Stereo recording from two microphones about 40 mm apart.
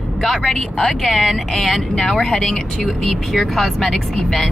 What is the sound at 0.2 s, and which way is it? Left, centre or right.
Speech, centre.